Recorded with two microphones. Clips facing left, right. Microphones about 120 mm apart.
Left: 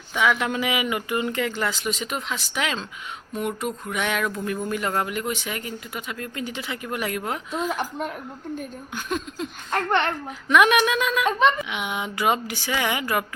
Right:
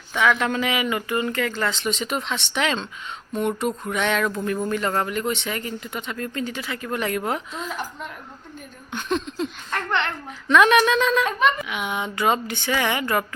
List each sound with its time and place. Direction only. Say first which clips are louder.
0.1 s speech: right 2 dB; 10° left (ahead or behind)
7.5 s speech: left 5 dB; 55° left (ahead or behind)
8.9 s speech: right 5 dB; 5° left (ahead or behind)
9.7 s speech: left 3 dB; 45° left (ahead or behind)
10.5 s speech: right 2 dB; 15° left (ahead or behind)
11.3 s speech: left 1 dB; 20° left (ahead or behind)